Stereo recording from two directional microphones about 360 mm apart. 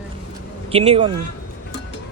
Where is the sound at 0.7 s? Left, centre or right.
Centre.